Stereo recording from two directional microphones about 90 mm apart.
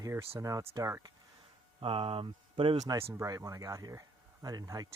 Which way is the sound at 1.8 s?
90° right.